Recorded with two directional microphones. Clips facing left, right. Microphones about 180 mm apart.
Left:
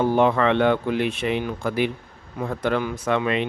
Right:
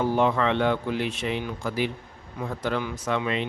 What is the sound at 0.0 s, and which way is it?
Speech, 60° left (ahead or behind).